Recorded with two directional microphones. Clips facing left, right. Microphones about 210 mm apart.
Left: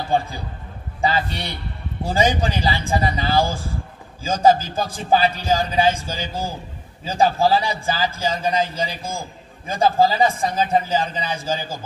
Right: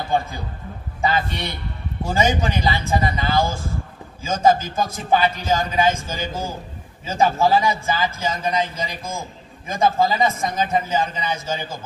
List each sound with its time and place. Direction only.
1.0 s a man's voice: 30° left (ahead or behind)